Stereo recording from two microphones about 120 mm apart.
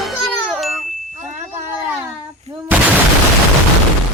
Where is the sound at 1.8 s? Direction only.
10° right (ahead or behind).